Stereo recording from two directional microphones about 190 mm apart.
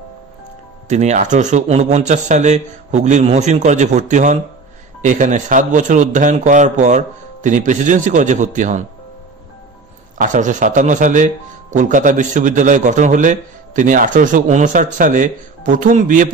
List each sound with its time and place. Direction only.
0.8 s speech: 35° right (ahead or behind)
10.1 s speech: 40° right (ahead or behind)